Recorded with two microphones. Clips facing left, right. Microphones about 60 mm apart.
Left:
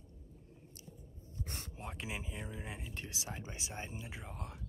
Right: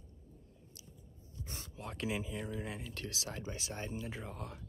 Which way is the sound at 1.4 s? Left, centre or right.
Left.